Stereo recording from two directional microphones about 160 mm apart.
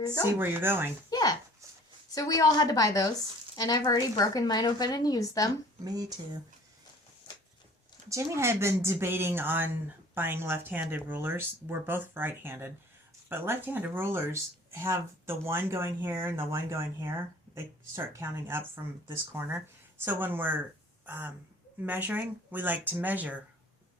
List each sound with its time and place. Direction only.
0.0 s speech: 25° left (ahead or behind)
0.3 s speech: 15° right (ahead or behind)
1.1 s a sound: 25° left (ahead or behind)
2.0 s speech: 20° left (ahead or behind)
5.8 s speech: 25° right (ahead or behind)
8.1 s speech: 15° right (ahead or behind)